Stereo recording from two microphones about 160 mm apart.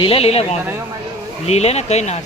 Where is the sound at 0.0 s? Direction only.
35° left (ahead or behind).